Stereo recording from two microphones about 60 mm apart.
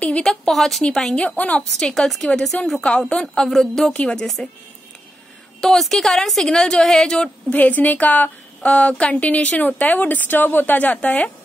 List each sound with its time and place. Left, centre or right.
0.0 s a woman's voice: centre
0.8 s a woman's voice: centre
1.2 s a woman's voice: left
1.8 s a woman's voice: centre
3.9 s a woman's voice: centre
5.6 s a woman's voice: centre
7.4 s a woman's voice: left